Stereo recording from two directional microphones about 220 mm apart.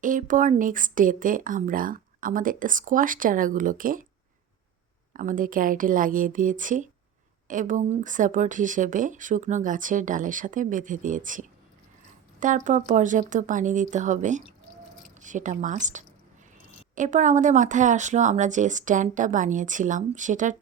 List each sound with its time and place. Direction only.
0.0 s speech: 35° right (ahead or behind)
5.1 s speech: 40° right (ahead or behind)